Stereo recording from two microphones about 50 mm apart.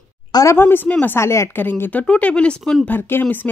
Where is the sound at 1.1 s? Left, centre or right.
Left.